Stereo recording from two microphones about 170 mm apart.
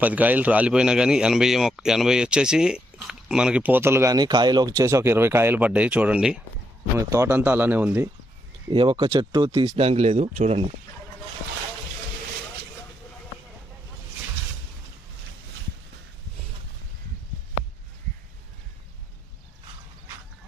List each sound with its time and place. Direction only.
0.0 s a man's voice: 10° right (ahead or behind)
8.7 s speech: 30° right (ahead or behind)